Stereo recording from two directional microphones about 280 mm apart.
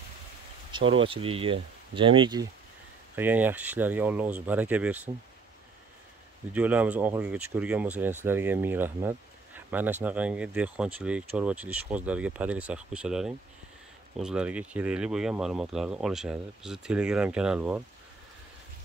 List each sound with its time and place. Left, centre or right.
1.0 s speech: centre
3.2 s speech: centre
6.5 s speech: centre